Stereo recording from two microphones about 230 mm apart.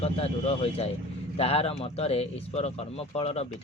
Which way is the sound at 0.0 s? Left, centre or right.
Left.